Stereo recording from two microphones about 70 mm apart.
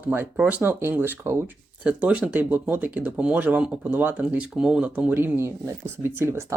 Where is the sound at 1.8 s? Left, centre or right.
Centre.